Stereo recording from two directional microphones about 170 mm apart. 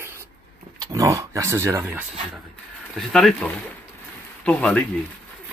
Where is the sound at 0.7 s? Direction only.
20° right (ahead or behind).